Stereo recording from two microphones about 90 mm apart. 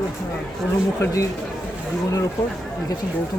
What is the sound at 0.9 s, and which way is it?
Speech, 40° left (ahead or behind).